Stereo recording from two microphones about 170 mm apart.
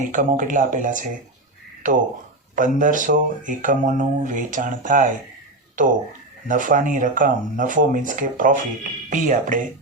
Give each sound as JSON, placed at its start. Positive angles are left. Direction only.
{"t": 0.1, "sound": "speech", "side_deg": -50}